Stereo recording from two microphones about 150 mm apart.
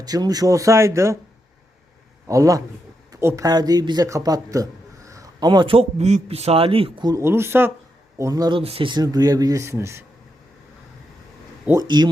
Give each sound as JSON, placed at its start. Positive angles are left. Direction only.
{"t": 0.0, "sound": "a man's voice", "side_deg": -25}
{"t": 2.2, "sound": "a man's voice", "side_deg": -20}
{"t": 7.1, "sound": "a man's voice", "side_deg": -15}
{"t": 8.5, "sound": "a man's voice", "side_deg": -40}
{"t": 11.8, "sound": "a man's voice", "side_deg": -30}